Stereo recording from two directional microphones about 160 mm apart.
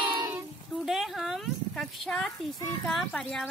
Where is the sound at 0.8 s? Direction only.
Centre (ahead or behind).